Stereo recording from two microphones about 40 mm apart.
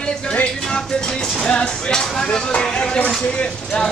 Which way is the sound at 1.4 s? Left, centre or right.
Left.